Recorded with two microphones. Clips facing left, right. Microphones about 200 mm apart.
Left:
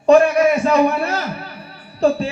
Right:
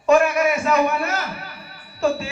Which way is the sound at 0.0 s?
30° left (ahead or behind).